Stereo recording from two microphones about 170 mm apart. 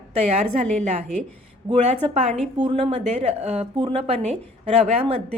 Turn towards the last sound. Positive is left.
turn(degrees=-35)  # may be behind; listen again after turning